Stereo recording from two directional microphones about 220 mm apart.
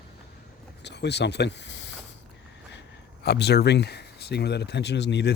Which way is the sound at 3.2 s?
50° left (ahead or behind).